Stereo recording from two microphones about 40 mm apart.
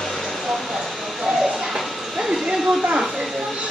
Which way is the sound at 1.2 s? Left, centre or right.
Centre.